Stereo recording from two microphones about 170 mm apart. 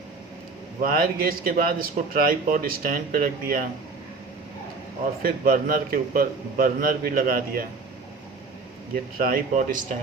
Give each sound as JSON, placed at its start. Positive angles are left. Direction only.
{"t": 0.8, "sound": "a man's voice", "side_deg": -60}
{"t": 5.2, "sound": "a man's voice", "side_deg": -55}
{"t": 9.1, "sound": "a man's voice", "side_deg": -55}